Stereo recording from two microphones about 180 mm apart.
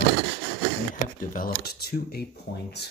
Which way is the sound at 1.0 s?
50° left (ahead or behind).